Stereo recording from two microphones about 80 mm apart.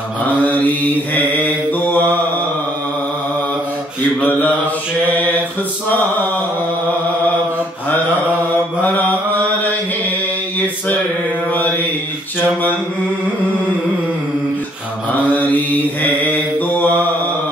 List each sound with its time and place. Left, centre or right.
0.4 s mantra: centre
4.3 s mantra: left
5.9 s a sound: left
8.8 s mantra: left
16.0 s mantra: centre